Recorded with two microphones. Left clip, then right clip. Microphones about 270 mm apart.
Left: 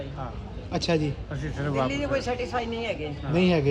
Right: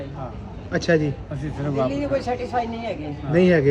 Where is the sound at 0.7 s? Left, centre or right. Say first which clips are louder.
Right 6 dB; centre.